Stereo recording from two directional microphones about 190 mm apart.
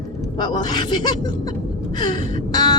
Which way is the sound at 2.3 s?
20° left (ahead or behind).